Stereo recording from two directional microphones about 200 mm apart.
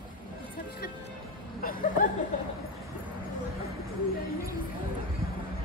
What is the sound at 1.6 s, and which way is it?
Vehicle, 45° left (ahead or behind).